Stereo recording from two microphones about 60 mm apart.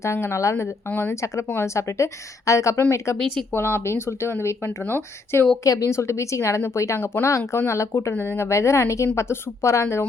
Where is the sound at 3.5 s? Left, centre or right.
Left.